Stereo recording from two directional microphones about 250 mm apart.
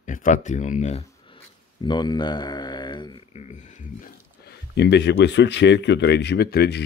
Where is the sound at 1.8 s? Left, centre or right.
Centre.